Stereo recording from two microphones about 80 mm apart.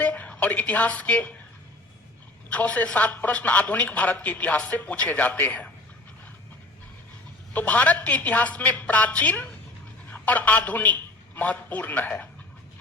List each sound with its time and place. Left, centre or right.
0.0 s a woman's voice: centre
2.5 s a man's voice: centre
7.5 s a man's voice: centre